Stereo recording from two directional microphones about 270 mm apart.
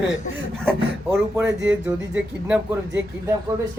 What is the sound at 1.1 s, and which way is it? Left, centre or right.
Speech, centre.